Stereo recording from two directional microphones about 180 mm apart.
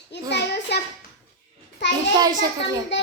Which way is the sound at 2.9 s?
80° left.